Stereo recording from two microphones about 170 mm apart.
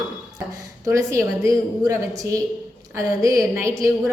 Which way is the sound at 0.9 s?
15° right (ahead or behind).